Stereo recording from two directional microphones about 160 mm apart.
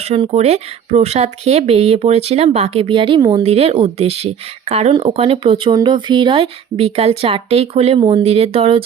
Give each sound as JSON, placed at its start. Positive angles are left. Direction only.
{"t": 0.1, "sound": "speech", "side_deg": -40}
{"t": 3.4, "sound": "speech", "side_deg": -40}